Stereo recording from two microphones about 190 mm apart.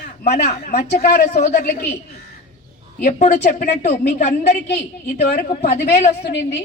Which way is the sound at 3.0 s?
40° left (ahead or behind).